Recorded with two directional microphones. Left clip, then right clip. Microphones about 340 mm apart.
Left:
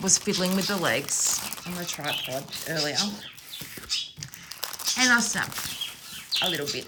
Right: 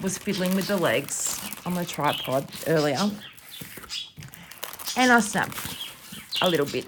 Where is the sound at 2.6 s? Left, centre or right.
Right.